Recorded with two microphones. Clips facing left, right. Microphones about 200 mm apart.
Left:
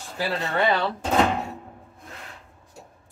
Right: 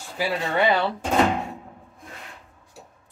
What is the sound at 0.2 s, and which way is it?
Speech, 10° right (ahead or behind).